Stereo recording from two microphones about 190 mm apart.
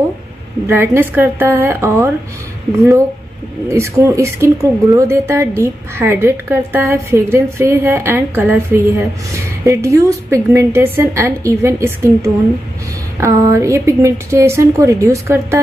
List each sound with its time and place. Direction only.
0.7 s speech: 10° right (ahead or behind)
3.6 s speech: 15° right (ahead or behind)